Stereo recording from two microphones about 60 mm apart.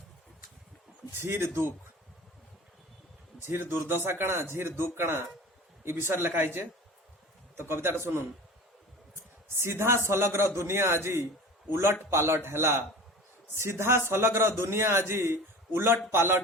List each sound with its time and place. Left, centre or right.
1.2 s a man's voice: right
3.4 s a man's voice: right
9.6 s a man's voice: right